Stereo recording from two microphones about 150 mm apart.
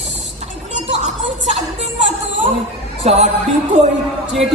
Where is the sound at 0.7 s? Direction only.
50° right (ahead or behind).